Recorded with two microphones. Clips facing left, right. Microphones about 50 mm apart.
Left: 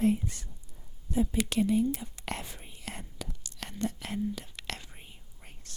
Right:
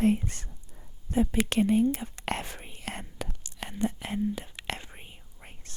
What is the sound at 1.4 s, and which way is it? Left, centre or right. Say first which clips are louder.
Whispering: right 3 dB; right.